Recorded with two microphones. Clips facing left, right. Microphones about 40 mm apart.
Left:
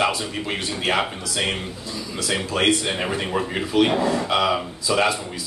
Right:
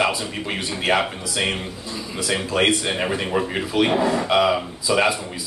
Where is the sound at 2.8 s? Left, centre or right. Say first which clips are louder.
Right 1 dB; centre.